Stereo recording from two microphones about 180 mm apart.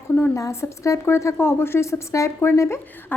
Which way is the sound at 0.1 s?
15° left (ahead or behind).